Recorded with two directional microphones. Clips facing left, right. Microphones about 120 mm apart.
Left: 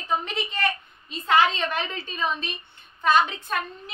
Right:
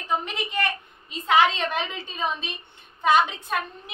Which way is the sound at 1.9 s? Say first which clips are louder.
Left 1 dB; 15° right (ahead or behind).